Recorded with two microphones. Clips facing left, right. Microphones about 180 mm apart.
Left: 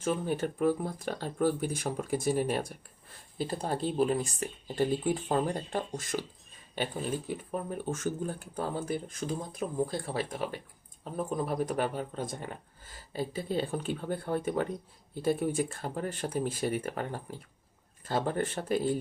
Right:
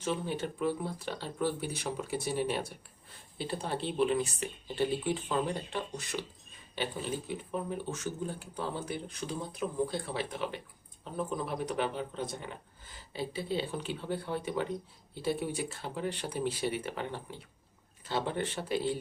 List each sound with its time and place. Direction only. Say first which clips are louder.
0.0 s speech: left 3 dB; 50° left (ahead or behind)
7.3 s speech: left 1 dB; 45° left (ahead or behind)